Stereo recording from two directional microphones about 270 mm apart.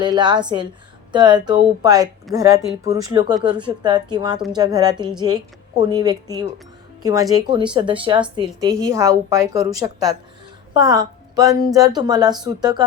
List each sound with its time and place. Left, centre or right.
0.0 s speech: centre